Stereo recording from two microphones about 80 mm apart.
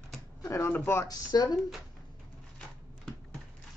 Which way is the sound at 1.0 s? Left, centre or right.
Left.